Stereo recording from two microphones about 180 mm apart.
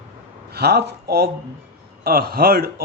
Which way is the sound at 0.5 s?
65° right (ahead or behind).